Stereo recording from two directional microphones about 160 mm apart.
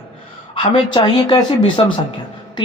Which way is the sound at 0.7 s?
30° left (ahead or behind).